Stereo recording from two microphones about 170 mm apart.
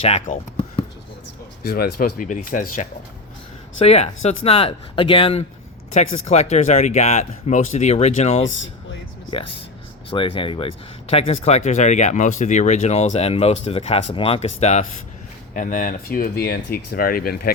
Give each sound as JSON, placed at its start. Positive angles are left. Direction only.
{"t": 0.0, "sound": "basketball bounce", "side_deg": 40}
{"t": 1.6, "sound": "speech", "side_deg": 60}
{"t": 3.8, "sound": "speech", "side_deg": 40}
{"t": 10.1, "sound": "speech", "side_deg": 30}
{"t": 15.5, "sound": "speech", "side_deg": 50}